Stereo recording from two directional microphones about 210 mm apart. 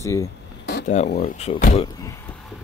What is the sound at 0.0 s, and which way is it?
Speech, 15° left (ahead or behind).